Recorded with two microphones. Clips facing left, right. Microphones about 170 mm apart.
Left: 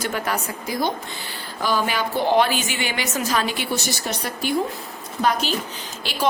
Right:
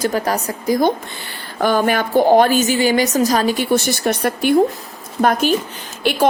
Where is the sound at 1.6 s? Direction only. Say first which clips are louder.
Right 7 dB; 55° right (ahead or behind).